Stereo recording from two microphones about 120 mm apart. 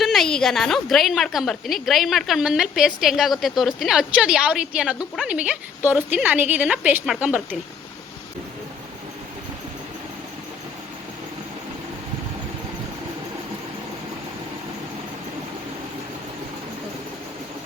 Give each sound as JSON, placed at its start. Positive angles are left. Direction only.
{"t": 0.0, "sound": "a woman's voice", "side_deg": 0}